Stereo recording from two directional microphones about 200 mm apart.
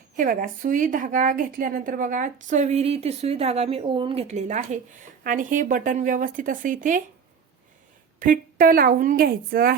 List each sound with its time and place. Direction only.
0.2 s a woman's voice: 45° right (ahead or behind)
8.2 s a woman's voice: 45° right (ahead or behind)